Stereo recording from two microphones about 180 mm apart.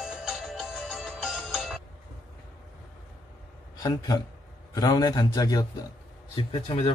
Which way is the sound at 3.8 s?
20° left (ahead or behind).